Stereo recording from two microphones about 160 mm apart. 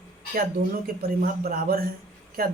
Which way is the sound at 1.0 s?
70° right (ahead or behind).